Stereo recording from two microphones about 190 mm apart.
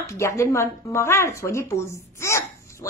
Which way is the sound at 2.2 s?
15° left (ahead or behind).